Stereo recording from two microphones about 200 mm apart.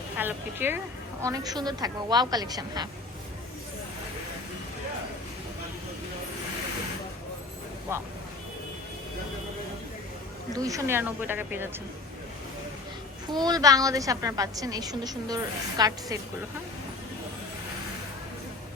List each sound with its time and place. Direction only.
0.2 s a woman's voice: 10° right (ahead or behind)
10.5 s a woman's voice: 15° right (ahead or behind)
13.3 s a woman's voice: 20° right (ahead or behind)